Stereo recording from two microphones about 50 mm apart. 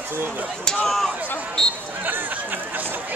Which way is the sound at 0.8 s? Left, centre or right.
Centre.